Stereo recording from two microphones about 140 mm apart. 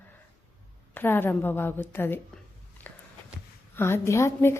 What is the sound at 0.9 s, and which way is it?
A woman's voice, 15° left (ahead or behind).